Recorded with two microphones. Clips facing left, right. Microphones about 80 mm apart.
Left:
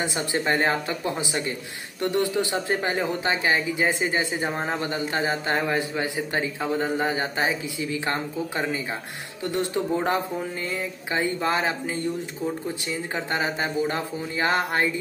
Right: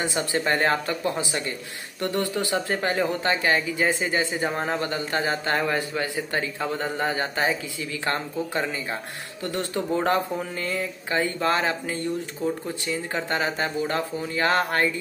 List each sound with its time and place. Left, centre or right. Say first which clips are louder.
0.0 s speech: right 1 dB; left